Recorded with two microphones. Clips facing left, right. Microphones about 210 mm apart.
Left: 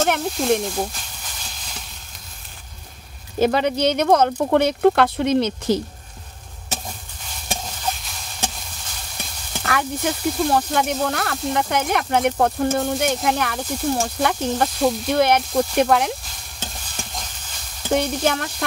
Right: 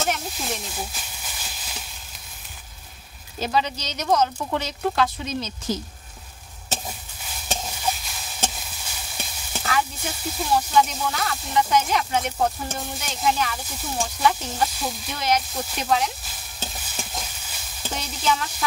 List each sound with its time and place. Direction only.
0.0 s speech: 60° left (ahead or behind)
0.9 s a sound: 5° right (ahead or behind)
3.3 s speech: 55° left (ahead or behind)
7.6 s stir: 5° right (ahead or behind)
9.6 s speech: 60° left (ahead or behind)
16.8 s stir: 5° right (ahead or behind)
17.9 s speech: 60° left (ahead or behind)